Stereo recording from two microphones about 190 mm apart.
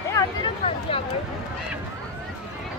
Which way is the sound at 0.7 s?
30° left (ahead or behind).